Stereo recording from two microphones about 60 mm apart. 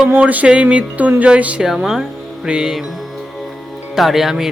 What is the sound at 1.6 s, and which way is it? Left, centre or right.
Speech, centre.